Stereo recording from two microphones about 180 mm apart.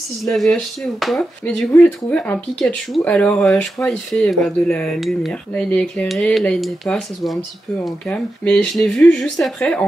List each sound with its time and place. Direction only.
0.2 s speech: centre (ahead or behind)